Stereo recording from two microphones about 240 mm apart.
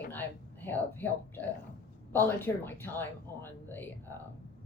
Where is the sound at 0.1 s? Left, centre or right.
Centre.